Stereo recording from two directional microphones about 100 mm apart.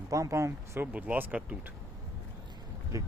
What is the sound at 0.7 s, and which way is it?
Speech, 15° right (ahead or behind).